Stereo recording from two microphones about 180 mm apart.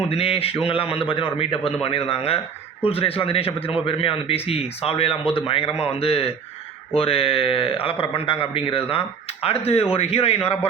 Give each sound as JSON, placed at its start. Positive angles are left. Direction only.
{"t": 0.1, "sound": "speech", "side_deg": 30}